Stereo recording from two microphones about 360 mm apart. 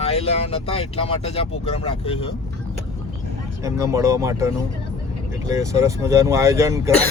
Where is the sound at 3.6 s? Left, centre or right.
Centre.